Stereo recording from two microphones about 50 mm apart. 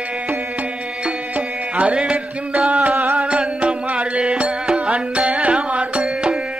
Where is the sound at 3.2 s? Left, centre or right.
Right.